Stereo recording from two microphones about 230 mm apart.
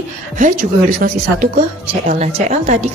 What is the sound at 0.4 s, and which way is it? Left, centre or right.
Speech, right.